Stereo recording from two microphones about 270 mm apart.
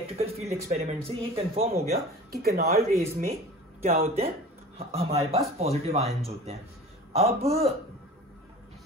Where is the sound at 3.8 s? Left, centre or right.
Right.